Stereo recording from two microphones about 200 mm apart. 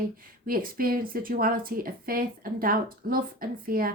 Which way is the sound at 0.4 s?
45° right (ahead or behind).